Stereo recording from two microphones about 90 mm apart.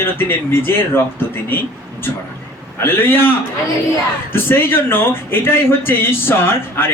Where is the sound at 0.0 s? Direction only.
25° left (ahead or behind).